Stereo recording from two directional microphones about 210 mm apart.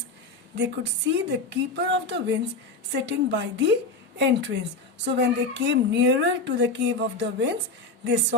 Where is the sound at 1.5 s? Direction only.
55° right (ahead or behind).